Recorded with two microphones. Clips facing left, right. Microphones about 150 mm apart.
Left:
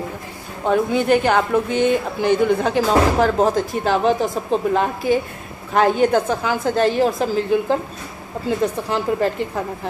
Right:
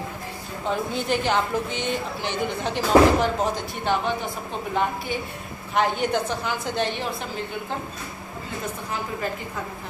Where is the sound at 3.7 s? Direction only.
90° left.